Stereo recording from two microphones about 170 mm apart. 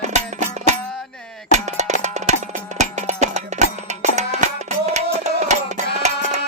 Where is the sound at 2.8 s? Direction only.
45° right (ahead or behind).